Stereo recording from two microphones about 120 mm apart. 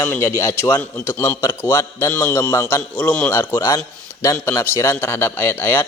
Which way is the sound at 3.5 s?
30° left (ahead or behind).